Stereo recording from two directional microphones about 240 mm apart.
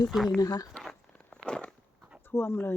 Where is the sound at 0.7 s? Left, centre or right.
Centre.